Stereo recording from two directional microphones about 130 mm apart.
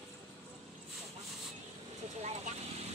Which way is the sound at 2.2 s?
55° right (ahead or behind).